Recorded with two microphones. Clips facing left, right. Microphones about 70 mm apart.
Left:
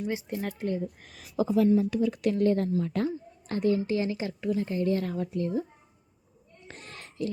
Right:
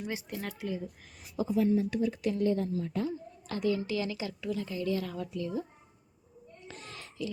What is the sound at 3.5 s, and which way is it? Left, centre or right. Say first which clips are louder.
Speech: left 4 dB; left.